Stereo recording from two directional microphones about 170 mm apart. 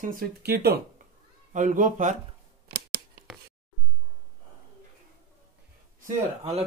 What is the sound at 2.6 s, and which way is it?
Scissors, 60° right (ahead or behind).